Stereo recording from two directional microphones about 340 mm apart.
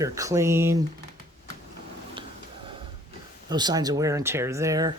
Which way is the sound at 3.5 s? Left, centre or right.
Centre.